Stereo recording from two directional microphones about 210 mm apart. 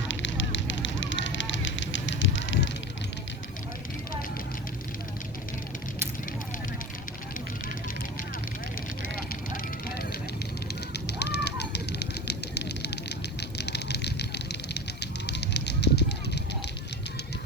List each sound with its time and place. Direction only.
0.1 s fire: 60° left (ahead or behind)
9.8 s vehicle: 45° left (ahead or behind)
10.9 s bird: 50° left (ahead or behind)
13.6 s vehicle: 55° left (ahead or behind)
15.3 s fire: 55° left (ahead or behind)